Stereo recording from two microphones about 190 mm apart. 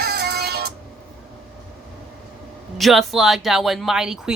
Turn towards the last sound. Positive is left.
turn(degrees=-5)  # may be behind; listen again after turning